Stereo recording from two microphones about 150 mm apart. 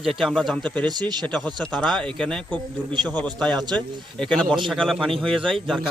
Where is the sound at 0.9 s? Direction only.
30° right (ahead or behind).